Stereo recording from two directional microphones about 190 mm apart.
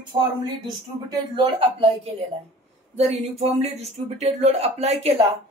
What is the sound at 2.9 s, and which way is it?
Speech, 35° right (ahead or behind).